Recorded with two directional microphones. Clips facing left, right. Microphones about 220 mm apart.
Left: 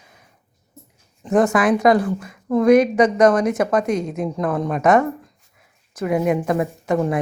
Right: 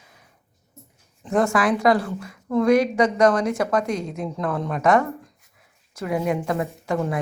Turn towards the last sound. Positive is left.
turn(degrees=20)  # may be behind; listen again after turning